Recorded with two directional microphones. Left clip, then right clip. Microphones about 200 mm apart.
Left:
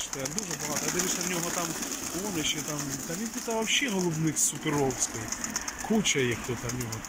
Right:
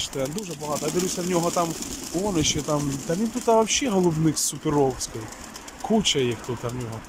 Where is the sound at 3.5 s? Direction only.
15° right (ahead or behind).